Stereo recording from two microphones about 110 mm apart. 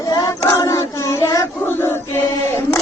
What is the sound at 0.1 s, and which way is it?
Child singing, 35° left (ahead or behind).